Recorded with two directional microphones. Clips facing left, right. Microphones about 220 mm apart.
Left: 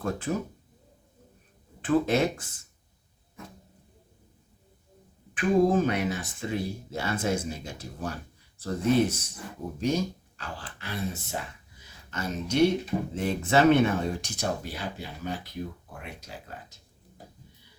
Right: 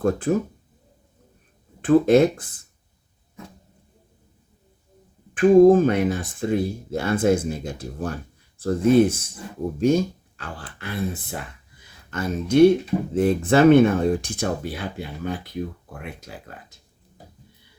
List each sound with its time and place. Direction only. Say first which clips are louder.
0.0 s speech: right 9 dB; 50° right (ahead or behind)
1.8 s speech: right 9 dB; 50° right (ahead or behind)
5.3 s speech: right 10 dB; 50° right (ahead or behind)